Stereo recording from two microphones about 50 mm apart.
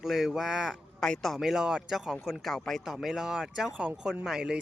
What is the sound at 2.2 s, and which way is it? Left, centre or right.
Speech, centre.